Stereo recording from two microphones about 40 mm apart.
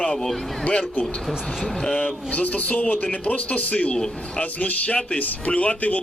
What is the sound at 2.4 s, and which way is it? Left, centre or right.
Speech, left.